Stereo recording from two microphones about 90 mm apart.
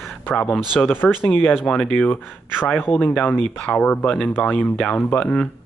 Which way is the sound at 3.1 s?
10° left (ahead or behind).